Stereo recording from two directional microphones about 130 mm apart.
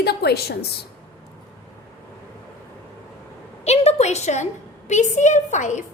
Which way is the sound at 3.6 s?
55° left (ahead or behind).